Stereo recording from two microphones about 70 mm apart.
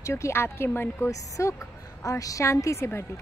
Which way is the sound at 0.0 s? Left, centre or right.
Left.